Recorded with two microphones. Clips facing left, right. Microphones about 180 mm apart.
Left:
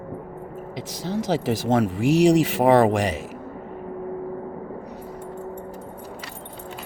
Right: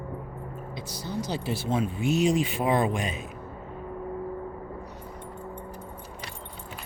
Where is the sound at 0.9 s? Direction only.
90° left.